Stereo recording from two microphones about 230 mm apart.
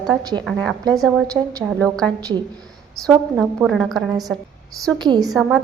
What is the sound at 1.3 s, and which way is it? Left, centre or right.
Speech, centre.